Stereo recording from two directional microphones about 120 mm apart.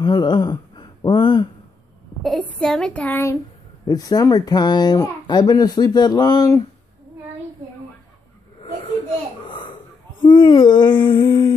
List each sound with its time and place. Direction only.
0.0 s speech: 35° left (ahead or behind)
2.2 s a woman's voice: 5° left (ahead or behind)
3.8 s speech: 30° left (ahead or behind)
9.5 s a sound: 45° left (ahead or behind)
10.2 s speech: 40° left (ahead or behind)